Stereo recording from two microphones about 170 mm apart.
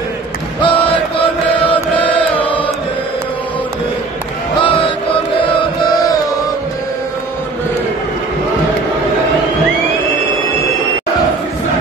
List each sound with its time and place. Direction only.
0.6 s chant: 30° left (ahead or behind)
2.1 s chant: 30° left (ahead or behind)